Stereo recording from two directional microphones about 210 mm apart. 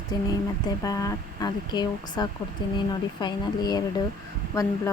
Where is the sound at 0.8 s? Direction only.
15° left (ahead or behind).